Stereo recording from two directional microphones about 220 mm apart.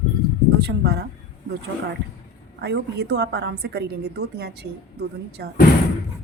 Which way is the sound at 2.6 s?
50° right (ahead or behind).